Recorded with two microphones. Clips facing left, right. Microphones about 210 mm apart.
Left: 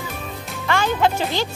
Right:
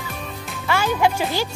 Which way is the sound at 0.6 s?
10° right (ahead or behind).